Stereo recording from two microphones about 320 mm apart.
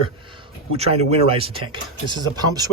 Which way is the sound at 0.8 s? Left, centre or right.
Centre.